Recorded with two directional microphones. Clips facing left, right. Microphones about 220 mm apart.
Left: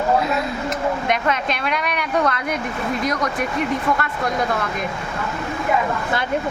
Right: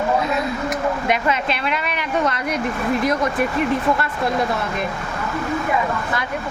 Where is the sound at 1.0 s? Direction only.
5° right (ahead or behind).